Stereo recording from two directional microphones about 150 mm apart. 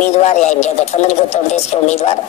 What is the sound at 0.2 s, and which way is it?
A woman's voice, 50° left (ahead or behind).